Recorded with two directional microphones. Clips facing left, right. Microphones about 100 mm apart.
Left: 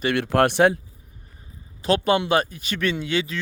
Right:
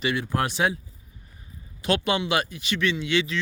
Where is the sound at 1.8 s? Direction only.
40° left (ahead or behind).